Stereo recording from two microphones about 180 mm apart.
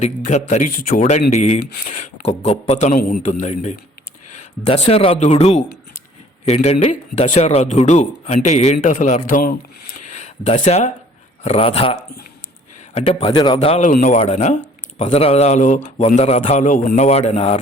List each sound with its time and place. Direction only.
0.0 s a man's voice: 40° left (ahead or behind)